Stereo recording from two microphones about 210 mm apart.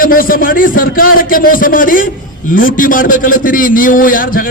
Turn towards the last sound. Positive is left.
turn(degrees=40)  # may be behind; listen again after turning